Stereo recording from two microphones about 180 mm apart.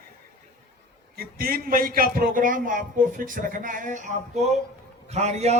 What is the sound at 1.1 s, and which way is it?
A man's voice, 55° right (ahead or behind).